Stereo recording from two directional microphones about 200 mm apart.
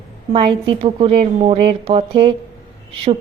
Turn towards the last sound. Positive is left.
turn(degrees=-25)  # may be behind; listen again after turning